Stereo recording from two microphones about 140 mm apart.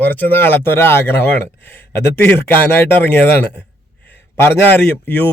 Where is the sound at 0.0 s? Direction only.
10° left (ahead or behind).